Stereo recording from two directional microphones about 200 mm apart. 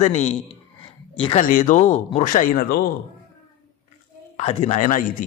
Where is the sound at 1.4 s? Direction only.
40° left (ahead or behind).